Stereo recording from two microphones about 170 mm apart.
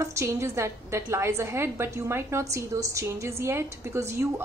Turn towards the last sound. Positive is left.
turn(degrees=-15)  # may be behind; listen again after turning